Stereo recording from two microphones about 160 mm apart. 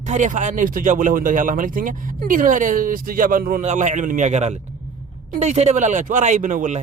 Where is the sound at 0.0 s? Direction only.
50° right (ahead or behind).